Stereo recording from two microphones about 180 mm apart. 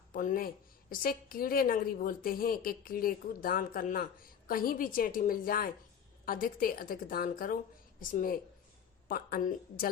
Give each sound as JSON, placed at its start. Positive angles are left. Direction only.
{"t": 0.1, "sound": "a woman's voice", "side_deg": 50}